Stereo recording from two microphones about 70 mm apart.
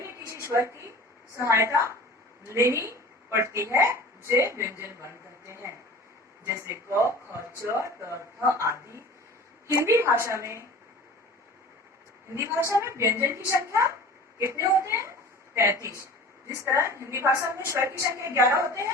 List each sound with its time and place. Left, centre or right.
0.0 s a sound: right
0.4 s a woman's voice: right
9.8 s speech: right
12.6 s a woman's voice: right